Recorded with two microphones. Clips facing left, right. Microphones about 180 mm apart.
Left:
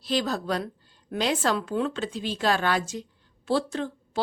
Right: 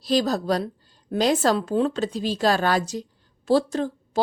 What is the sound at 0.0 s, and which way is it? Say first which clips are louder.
A woman's voice: right 5 dB; 40° right (ahead or behind).